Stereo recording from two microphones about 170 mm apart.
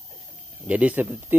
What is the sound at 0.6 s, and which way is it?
Speech, 10° right (ahead or behind).